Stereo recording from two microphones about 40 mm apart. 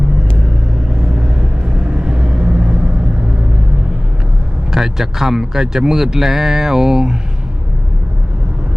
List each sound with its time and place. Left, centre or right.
1.1 s vehicle: right
4.7 s speech: centre